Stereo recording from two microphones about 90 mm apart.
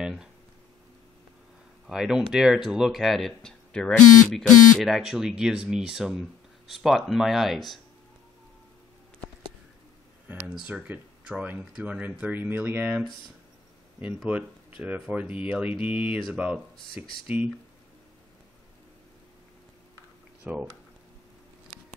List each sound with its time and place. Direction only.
0.0 s a sound: 5° right (ahead or behind)
1.9 s speech: 5° right (ahead or behind)
10.3 s speech: 20° right (ahead or behind)
14.0 s speech: 15° right (ahead or behind)
16.9 s speech: 80° left
20.5 s speech: 15° right (ahead or behind)